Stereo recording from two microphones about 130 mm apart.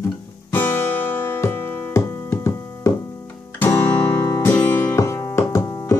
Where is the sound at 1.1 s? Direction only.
15° left (ahead or behind).